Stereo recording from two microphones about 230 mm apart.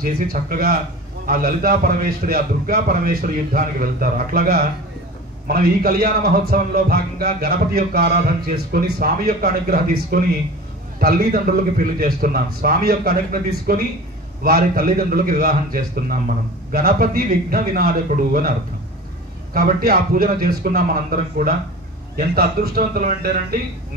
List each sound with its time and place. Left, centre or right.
0.0 s a man's voice: right
19.5 s a man's voice: right